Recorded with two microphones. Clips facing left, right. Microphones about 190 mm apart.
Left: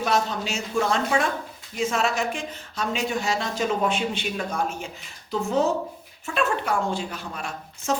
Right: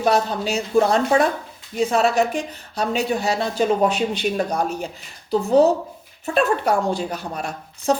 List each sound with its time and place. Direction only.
0.0 s speech: 35° right (ahead or behind)